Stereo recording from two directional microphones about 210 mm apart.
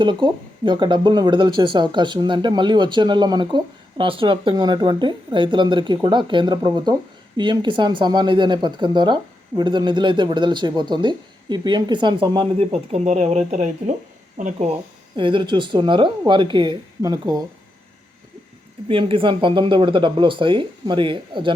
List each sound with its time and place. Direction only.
0.0 s speech: 20° right (ahead or behind)
15.1 s speech: 25° right (ahead or behind)
18.9 s speech: 25° right (ahead or behind)